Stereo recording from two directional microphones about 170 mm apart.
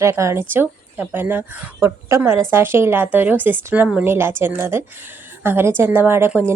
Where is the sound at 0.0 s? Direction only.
15° right (ahead or behind).